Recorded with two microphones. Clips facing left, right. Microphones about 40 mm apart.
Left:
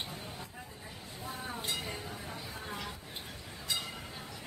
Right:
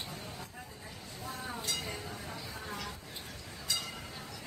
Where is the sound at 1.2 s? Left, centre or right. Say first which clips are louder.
Even; centre.